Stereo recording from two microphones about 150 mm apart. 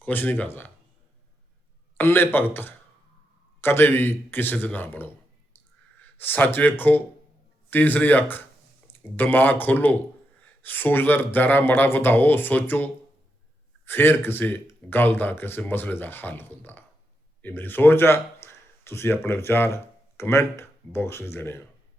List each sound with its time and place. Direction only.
0.0 s speech: 15° left (ahead or behind)
2.0 s speech: 15° left (ahead or behind)
6.1 s speech: 15° left (ahead or behind)
18.4 s a sound: 15° left (ahead or behind)
18.9 s speech: 15° left (ahead or behind)